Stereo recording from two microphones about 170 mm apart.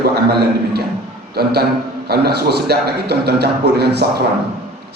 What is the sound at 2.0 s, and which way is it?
A man's voice, 70° right (ahead or behind).